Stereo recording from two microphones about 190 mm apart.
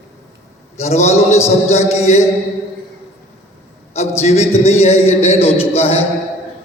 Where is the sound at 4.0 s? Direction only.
35° left (ahead or behind).